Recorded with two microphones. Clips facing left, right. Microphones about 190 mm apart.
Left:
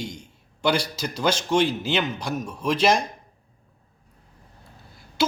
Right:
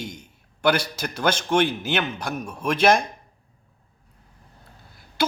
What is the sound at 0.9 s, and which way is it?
A man's voice, 60° right (ahead or behind).